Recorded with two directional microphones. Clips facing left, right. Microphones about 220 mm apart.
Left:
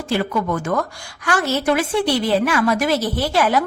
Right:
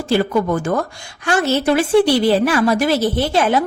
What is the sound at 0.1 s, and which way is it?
A woman's voice, 35° right (ahead or behind).